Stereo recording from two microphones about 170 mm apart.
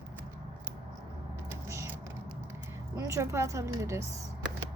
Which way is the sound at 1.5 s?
15° right (ahead or behind).